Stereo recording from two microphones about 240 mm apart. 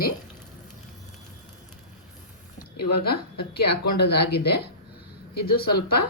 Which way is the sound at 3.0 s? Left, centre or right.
Left.